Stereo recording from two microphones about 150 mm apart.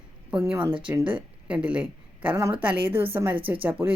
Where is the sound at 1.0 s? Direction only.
35° right (ahead or behind).